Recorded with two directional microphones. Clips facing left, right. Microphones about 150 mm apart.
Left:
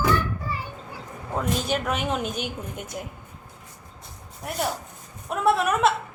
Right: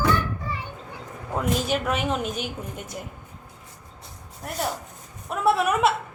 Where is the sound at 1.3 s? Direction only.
5° right (ahead or behind).